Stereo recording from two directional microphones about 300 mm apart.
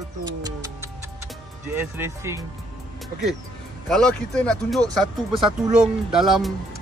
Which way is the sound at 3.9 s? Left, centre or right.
Centre.